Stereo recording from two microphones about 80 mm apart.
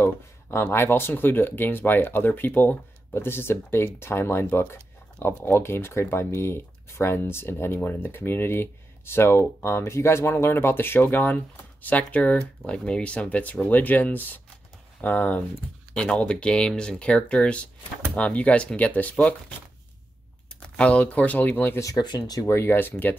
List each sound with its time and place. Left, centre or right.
0.0 s speech: left
20.6 s speech: centre
21.9 s speech: left
22.5 s speech: left